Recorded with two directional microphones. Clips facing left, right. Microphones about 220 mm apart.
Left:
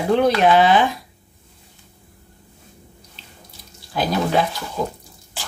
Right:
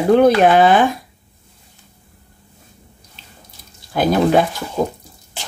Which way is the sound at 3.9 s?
50° right (ahead or behind).